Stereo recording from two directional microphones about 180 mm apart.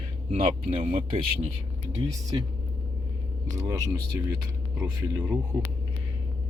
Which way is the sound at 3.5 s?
20° right (ahead or behind).